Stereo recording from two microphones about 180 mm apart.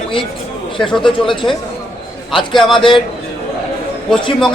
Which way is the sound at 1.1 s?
25° left (ahead or behind).